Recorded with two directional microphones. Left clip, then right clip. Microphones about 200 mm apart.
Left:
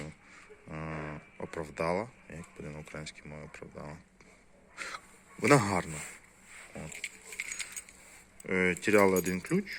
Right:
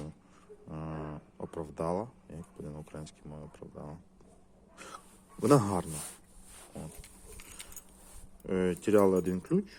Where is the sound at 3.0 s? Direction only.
Centre (ahead or behind).